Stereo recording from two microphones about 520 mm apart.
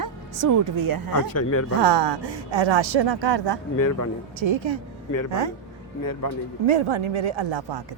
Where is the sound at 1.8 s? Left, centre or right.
Right.